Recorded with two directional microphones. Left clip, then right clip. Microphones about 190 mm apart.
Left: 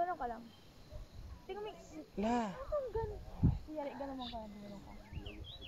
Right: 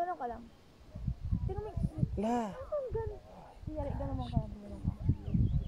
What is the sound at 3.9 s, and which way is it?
Speech, 25° right (ahead or behind).